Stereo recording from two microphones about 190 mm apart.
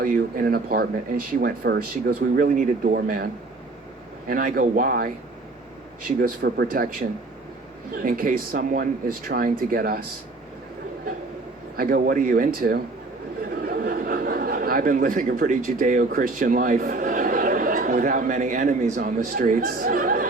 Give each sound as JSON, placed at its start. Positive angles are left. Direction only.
{"t": 0.0, "sound": "speech", "side_deg": -50}
{"t": 4.3, "sound": "speech", "side_deg": -45}
{"t": 6.1, "sound": "speech", "side_deg": -50}
{"t": 7.9, "sound": "speech", "side_deg": -45}
{"t": 11.8, "sound": "speech", "side_deg": -50}